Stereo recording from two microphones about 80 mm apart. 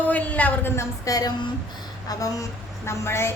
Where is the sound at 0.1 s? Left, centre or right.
Centre.